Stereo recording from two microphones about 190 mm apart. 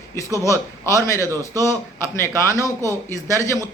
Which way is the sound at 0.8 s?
15° left (ahead or behind).